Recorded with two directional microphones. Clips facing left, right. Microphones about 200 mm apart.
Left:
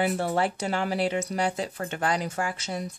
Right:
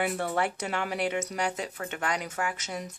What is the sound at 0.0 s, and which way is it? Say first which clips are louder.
Speech: left 3 dB; 30° left (ahead or behind).